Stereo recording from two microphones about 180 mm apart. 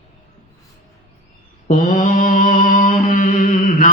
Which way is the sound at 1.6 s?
50° left (ahead or behind).